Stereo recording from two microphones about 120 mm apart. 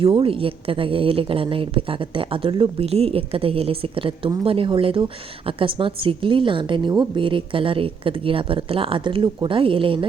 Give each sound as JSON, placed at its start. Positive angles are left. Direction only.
{"t": 0.0, "sound": "a woman's voice", "side_deg": -50}